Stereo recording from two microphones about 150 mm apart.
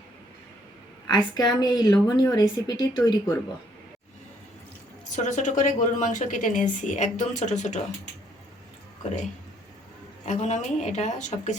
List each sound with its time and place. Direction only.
1.0 s a woman's voice: 30° left (ahead or behind)
5.1 s a woman's voice: 55° left (ahead or behind)
10.2 s speech: 50° left (ahead or behind)